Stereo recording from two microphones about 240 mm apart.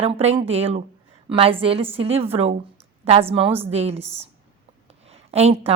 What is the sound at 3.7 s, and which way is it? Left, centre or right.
Speech, right.